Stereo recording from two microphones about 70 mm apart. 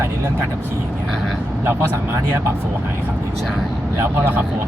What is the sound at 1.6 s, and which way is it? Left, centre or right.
Speech, right.